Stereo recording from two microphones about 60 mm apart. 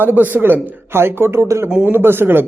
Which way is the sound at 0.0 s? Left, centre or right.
Right.